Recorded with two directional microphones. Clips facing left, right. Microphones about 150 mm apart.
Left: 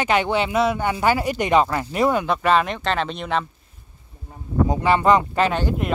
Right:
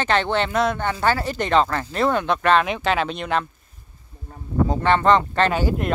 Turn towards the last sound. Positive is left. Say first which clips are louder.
# right 1 dB
turn(degrees=0)  # may be behind; listen again after turning